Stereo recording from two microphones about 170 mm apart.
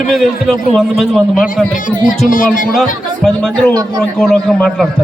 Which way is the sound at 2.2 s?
50° left (ahead or behind).